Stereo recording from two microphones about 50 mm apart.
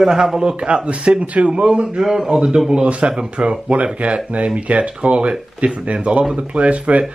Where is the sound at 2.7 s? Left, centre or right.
Right.